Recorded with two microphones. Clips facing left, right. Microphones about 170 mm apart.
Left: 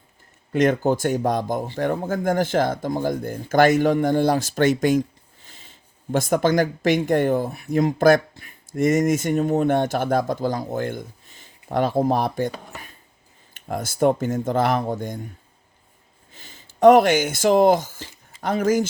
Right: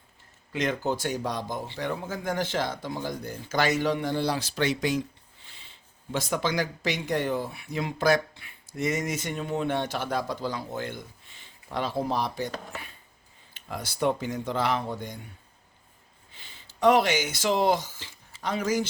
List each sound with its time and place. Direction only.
0.5 s speech: 50° left (ahead or behind)
13.5 s speech: 50° left (ahead or behind)
16.3 s speech: 45° left (ahead or behind)